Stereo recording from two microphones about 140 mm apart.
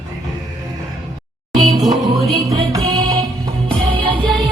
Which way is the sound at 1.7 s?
30° right (ahead or behind).